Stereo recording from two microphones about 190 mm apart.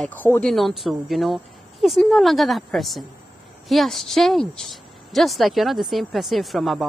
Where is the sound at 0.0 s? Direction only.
10° left (ahead or behind).